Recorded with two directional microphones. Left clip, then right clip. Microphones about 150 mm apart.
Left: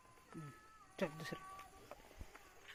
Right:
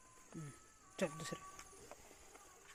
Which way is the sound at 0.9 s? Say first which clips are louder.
Right 1 dB; 10° right (ahead or behind).